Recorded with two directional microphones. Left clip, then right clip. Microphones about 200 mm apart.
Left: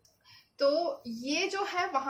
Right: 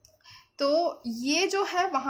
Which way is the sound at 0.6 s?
55° right (ahead or behind).